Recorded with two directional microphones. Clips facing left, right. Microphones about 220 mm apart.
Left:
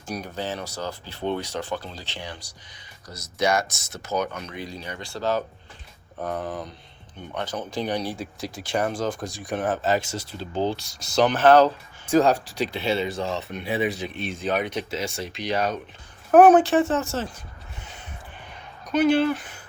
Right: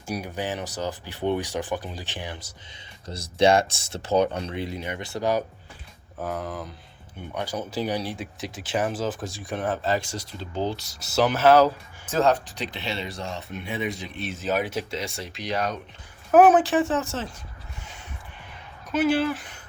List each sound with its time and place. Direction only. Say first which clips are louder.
0.1 s speech: right 1 dB; 10° right (ahead or behind)
6.2 s speech: left 1 dB; centre (ahead or behind)
10.1 s speech: left 2 dB; 25° left (ahead or behind)
10.8 s speech: left 2 dB; 5° right (ahead or behind)
12.0 s speech: left 3 dB; 15° left (ahead or behind)
13.7 s speech: left 5 dB; 35° left (ahead or behind)
13.9 s speech: left 3 dB; centre (ahead or behind)
18.4 s a sound: left 2 dB; 5° right (ahead or behind)